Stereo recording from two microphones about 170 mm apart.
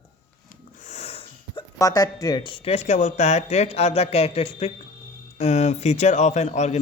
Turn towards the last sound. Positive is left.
turn(degrees=40)  # may be behind; listen again after turning